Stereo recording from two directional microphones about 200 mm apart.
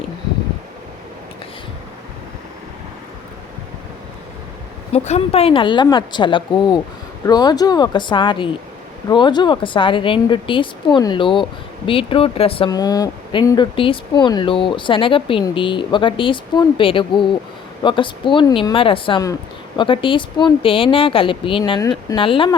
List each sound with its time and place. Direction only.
4.9 s speech: 35° left (ahead or behind)